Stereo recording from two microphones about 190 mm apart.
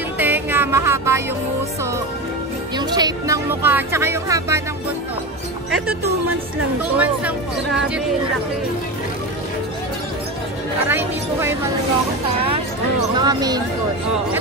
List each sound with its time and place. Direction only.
0.2 s music: 10° right (ahead or behind)
2.8 s speech: 20° right (ahead or behind)
7.0 s speech: 5° right (ahead or behind)
10.9 s speech: 10° right (ahead or behind)
13.1 s speech: 20° right (ahead or behind)